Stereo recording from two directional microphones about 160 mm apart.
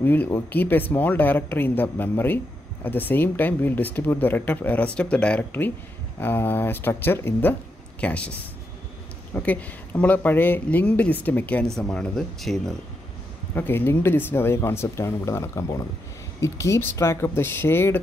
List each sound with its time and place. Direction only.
0.0 s speech: 10° left (ahead or behind)
9.3 s speech: 10° left (ahead or behind)
13.6 s speech: 15° left (ahead or behind)